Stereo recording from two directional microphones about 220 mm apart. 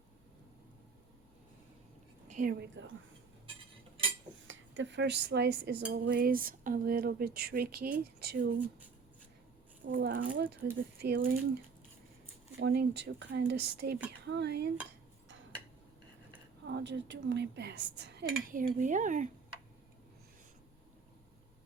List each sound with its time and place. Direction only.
2.2 s a woman's voice: 35° right (ahead or behind)
4.4 s speech: 55° right (ahead or behind)
9.9 s speech: 40° right (ahead or behind)
10.2 s speech: 55° right (ahead or behind)
10.5 s speech: 45° right (ahead or behind)
16.6 s speech: 50° right (ahead or behind); by 19.3 s 35° right (ahead or behind)